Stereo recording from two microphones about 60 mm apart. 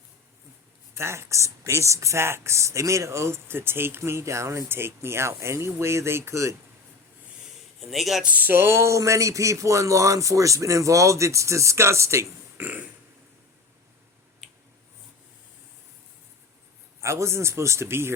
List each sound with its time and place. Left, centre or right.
0.9 s speech: right
7.8 s speech: centre
8.2 s speech: right
12.5 s a sound: right
17.0 s speech: right